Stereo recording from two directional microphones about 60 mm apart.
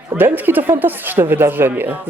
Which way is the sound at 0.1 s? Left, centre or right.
Right.